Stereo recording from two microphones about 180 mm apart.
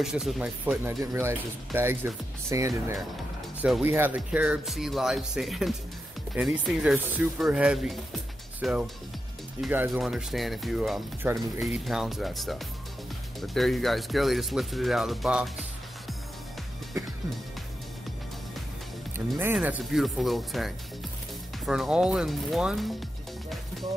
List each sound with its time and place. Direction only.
0.0 s speech: centre (ahead or behind); by 3.0 s 15° right (ahead or behind)
3.6 s speech: 5° right (ahead or behind)
19.1 s speech: 10° right (ahead or behind)
19.8 s speech: centre (ahead or behind)